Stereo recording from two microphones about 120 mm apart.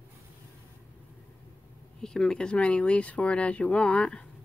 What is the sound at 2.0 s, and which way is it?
Speech, 5° left (ahead or behind).